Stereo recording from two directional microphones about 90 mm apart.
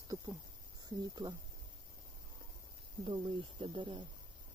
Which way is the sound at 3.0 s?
65° right (ahead or behind).